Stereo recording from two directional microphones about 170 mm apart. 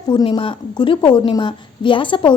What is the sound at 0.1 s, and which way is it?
A woman's voice, 30° left (ahead or behind).